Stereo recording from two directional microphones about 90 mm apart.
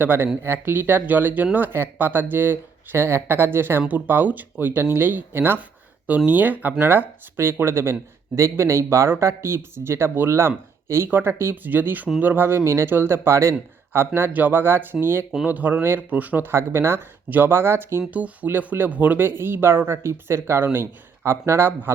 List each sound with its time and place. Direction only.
0.0 s speech: 25° right (ahead or behind)